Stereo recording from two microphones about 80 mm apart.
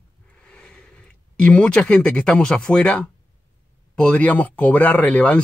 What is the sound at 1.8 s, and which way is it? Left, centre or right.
Speech, centre.